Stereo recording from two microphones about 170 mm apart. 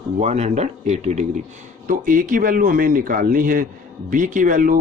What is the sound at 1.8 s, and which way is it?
Speech, 50° right (ahead or behind).